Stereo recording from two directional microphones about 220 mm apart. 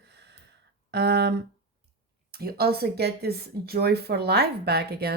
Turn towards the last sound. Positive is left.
turn(degrees=-45)  # may be behind; listen again after turning